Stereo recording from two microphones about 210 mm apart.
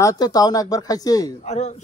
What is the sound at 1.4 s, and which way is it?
Speech, 30° left (ahead or behind).